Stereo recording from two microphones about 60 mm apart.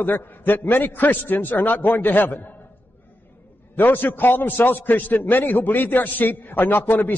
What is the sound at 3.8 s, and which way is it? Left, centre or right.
A man's voice, left.